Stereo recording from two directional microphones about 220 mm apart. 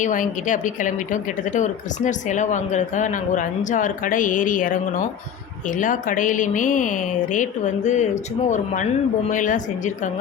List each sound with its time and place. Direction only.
0.0 s a woman's voice: 35° left (ahead or behind)